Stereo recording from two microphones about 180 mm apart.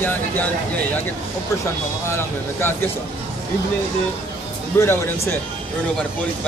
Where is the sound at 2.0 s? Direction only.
15° left (ahead or behind).